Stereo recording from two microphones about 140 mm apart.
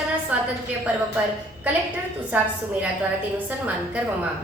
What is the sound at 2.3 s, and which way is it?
Speech, 10° right (ahead or behind).